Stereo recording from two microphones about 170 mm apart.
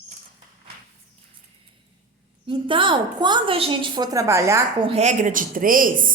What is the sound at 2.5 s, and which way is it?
A woman's voice, 30° right (ahead or behind).